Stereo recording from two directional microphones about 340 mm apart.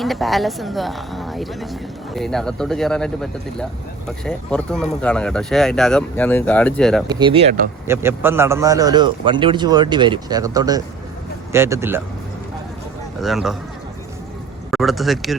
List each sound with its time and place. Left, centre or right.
0.0 s speech: centre
7.1 s a man's voice: centre
7.9 s a man's voice: centre
13.2 s speech: centre
14.7 s speech: centre